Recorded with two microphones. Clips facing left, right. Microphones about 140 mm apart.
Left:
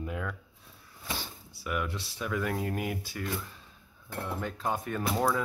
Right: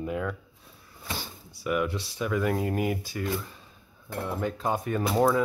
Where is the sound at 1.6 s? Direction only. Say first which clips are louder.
Right 6 dB; 5° right (ahead or behind).